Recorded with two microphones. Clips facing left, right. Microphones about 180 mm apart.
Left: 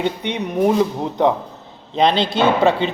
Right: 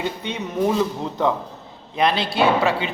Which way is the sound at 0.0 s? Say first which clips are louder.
Left 5 dB; 20° left (ahead or behind).